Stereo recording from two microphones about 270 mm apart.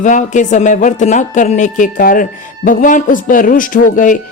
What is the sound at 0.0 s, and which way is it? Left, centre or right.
Speech, left.